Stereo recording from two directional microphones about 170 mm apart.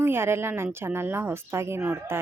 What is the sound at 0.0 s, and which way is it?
Speech, 15° right (ahead or behind).